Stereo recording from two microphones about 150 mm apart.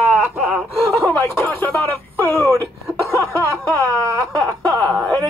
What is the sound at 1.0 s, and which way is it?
Speech, 15° left (ahead or behind).